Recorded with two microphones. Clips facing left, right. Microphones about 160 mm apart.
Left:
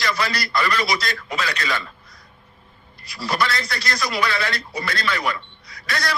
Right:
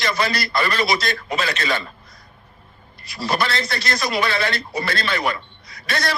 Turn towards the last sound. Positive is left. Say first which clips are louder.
# right 2 dB
turn(degrees=-25)  # may be behind; listen again after turning